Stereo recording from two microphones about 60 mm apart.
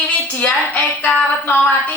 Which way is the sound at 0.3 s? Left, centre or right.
Left.